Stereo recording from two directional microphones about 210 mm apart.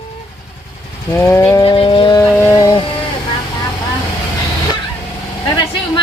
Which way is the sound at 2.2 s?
10° left (ahead or behind).